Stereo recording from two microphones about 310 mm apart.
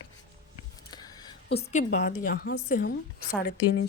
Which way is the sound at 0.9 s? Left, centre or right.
Centre.